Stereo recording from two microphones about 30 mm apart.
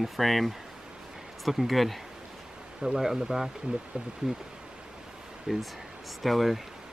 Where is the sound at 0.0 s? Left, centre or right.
Centre.